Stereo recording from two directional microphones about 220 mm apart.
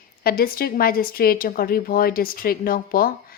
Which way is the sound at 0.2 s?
40° left (ahead or behind).